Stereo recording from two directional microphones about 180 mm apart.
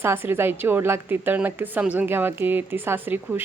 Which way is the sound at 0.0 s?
15° right (ahead or behind).